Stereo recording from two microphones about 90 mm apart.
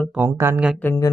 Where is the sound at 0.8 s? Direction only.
20° left (ahead or behind).